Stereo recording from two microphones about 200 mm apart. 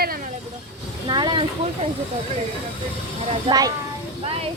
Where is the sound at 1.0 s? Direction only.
20° right (ahead or behind).